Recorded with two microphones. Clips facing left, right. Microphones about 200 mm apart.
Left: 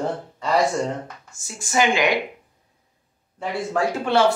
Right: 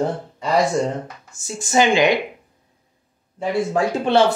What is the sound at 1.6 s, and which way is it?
Speech, 25° right (ahead or behind).